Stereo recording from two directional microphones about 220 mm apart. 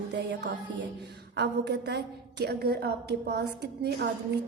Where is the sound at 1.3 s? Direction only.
50° right (ahead or behind).